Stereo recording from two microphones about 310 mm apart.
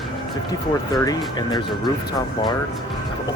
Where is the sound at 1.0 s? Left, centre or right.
Centre.